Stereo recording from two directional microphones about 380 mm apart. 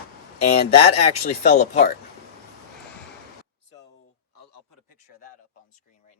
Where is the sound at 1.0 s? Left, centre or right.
Centre.